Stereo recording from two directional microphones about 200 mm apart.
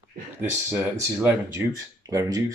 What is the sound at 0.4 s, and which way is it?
Speech, 10° right (ahead or behind).